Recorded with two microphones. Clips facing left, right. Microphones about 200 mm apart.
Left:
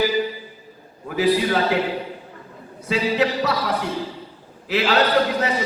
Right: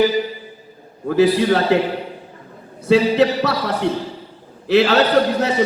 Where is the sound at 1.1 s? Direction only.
70° right (ahead or behind).